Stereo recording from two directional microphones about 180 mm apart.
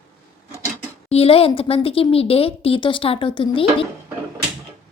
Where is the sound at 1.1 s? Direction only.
35° left (ahead or behind).